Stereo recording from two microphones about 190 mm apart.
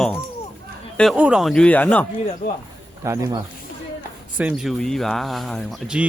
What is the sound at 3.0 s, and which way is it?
Speech, 15° right (ahead or behind).